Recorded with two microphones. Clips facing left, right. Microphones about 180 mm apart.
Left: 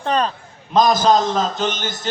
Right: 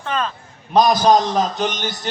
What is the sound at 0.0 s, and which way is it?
Speech, 40° left (ahead or behind).